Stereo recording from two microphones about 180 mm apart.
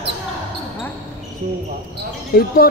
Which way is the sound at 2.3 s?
55° left (ahead or behind).